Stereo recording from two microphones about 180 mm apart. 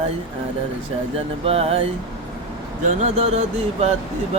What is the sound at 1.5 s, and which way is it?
Music, 35° right (ahead or behind).